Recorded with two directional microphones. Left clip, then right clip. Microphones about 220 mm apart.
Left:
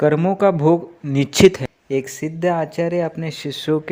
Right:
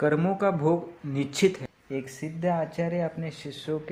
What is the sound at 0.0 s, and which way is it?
Speech, 30° left (ahead or behind).